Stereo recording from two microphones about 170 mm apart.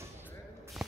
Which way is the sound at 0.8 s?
5° right (ahead or behind).